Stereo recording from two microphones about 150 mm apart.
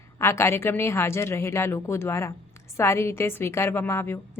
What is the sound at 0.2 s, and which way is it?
A woman's voice, 15° left (ahead or behind).